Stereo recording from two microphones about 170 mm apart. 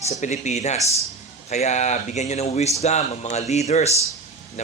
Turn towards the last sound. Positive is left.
turn(degrees=40)  # may be behind; listen again after turning